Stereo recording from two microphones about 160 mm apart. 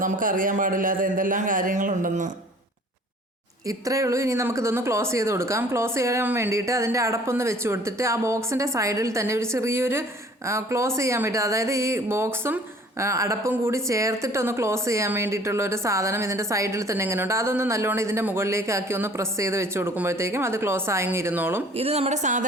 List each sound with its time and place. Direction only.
0.0 s a man's voice: 60° right (ahead or behind)
3.7 s a woman's voice: 20° right (ahead or behind)
21.8 s speech: 40° right (ahead or behind)